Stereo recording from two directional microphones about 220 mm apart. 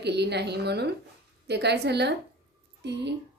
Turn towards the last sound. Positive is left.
turn(degrees=-50)  # may be behind; listen again after turning